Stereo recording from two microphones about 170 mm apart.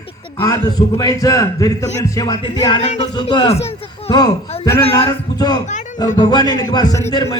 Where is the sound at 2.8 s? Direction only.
40° left (ahead or behind).